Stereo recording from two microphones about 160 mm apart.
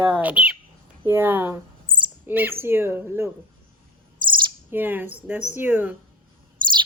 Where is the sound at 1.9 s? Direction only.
60° right (ahead or behind).